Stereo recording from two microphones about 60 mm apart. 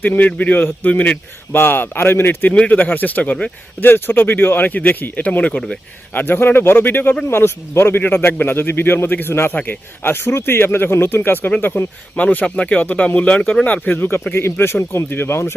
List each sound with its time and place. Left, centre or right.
0.0 s speech: left
1.5 s speech: left
5.5 s speech: centre
6.1 s speech: left
13.4 s speech: centre
13.7 s speech: left